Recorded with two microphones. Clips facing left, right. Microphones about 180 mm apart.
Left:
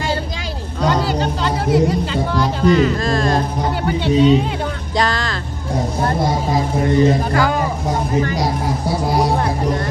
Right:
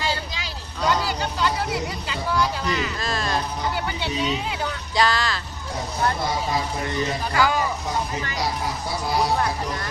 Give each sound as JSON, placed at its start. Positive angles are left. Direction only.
{"t": 0.9, "sound": "a sound", "side_deg": 45}
{"t": 2.4, "sound": "speech", "side_deg": 50}
{"t": 4.9, "sound": "speech", "side_deg": -5}
{"t": 6.1, "sound": "speech", "side_deg": 45}